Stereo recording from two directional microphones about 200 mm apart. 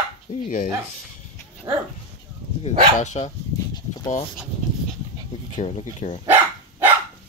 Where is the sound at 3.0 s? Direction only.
35° left (ahead or behind).